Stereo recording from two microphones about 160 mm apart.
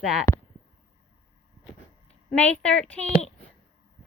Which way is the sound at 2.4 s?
5° left (ahead or behind).